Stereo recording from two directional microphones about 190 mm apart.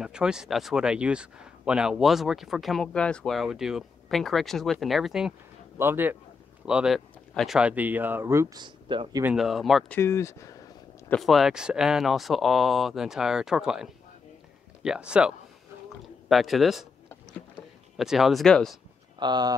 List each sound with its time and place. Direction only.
0.0 s speech: 5° right (ahead or behind)
8.6 s speech: 25° right (ahead or behind)
9.2 s speech: 5° right (ahead or behind)
9.9 s speech: 15° left (ahead or behind)
11.1 s speech: centre (ahead or behind)
17.9 s speech: centre (ahead or behind)
19.1 s speech: 20° right (ahead or behind)